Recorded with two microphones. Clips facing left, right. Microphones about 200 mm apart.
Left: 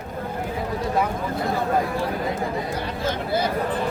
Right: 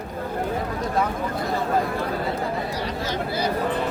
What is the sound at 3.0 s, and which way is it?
Chatter, 55° left (ahead or behind).